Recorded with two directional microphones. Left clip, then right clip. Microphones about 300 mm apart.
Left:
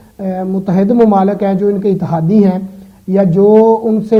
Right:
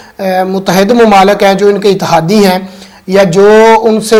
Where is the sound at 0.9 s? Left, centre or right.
Right.